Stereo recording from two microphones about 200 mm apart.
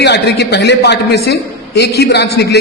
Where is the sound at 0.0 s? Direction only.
55° left (ahead or behind).